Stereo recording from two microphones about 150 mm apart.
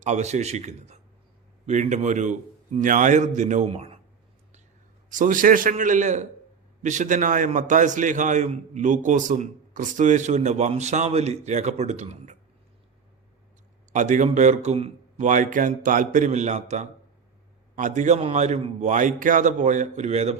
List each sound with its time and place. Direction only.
0.0 s a man's voice: 50° right (ahead or behind)
3.7 s speech: 45° right (ahead or behind)
5.0 s a man's voice: 60° right (ahead or behind)
13.9 s a man's voice: 55° right (ahead or behind)
15.3 s a man's voice: 60° right (ahead or behind)